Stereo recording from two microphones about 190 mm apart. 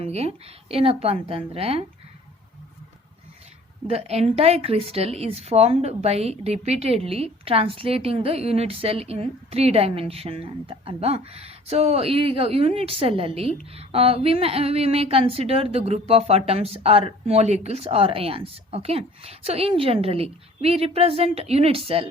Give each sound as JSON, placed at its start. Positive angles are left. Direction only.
{"t": 0.0, "sound": "a woman's voice", "side_deg": -35}
{"t": 3.8, "sound": "a woman's voice", "side_deg": -30}